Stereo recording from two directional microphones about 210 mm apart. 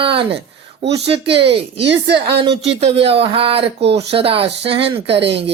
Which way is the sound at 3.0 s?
25° right (ahead or behind).